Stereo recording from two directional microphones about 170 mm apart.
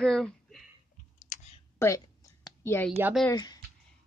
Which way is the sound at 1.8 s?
15° left (ahead or behind).